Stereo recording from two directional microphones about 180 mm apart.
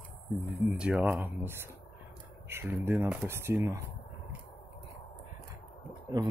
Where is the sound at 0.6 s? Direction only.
5° right (ahead or behind).